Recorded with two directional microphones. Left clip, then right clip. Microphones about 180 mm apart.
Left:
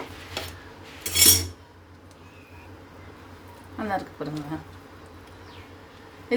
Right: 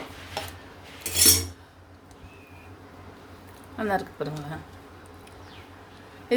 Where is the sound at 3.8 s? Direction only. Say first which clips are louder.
Right 2 dB; 40° right (ahead or behind).